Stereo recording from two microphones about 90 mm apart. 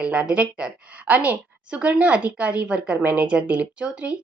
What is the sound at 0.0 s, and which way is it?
A woman's voice, 10° right (ahead or behind).